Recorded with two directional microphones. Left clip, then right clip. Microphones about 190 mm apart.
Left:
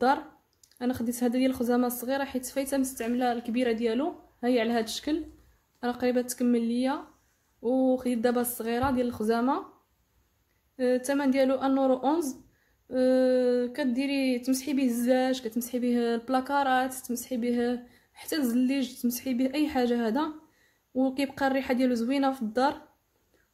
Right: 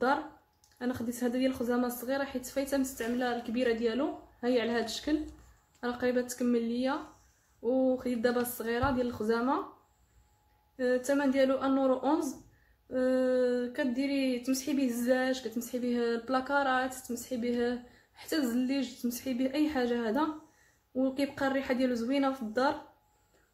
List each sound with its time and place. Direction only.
0.7 s speech: 50° left (ahead or behind)
10.8 s speech: 45° left (ahead or behind)